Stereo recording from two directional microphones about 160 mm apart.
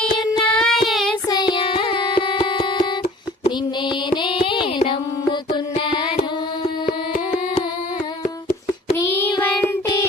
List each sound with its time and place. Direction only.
0.2 s child singing: 5° left (ahead or behind)
1.3 s music: 30° left (ahead or behind)
4.1 s music: 30° left (ahead or behind)
9.3 s child singing: 25° left (ahead or behind)